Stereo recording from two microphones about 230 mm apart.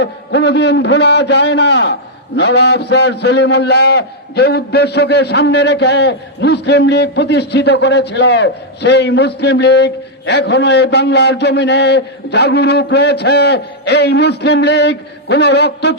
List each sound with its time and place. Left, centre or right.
0.0 s a man's voice: left